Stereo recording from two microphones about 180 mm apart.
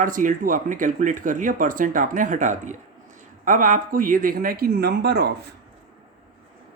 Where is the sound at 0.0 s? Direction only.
50° right (ahead or behind).